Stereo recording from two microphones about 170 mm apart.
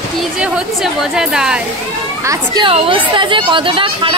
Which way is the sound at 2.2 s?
20° right (ahead or behind).